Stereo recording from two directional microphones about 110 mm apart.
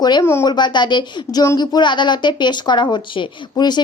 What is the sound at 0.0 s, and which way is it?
A woman's voice, 40° left (ahead or behind).